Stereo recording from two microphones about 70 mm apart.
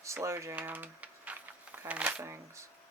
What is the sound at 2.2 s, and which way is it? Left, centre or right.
Speech, right.